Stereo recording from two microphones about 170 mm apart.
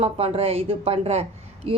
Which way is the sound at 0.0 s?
35° right (ahead or behind).